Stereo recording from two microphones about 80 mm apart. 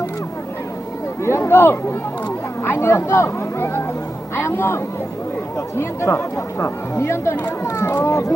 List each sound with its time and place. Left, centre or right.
1.2 s a man's voice: left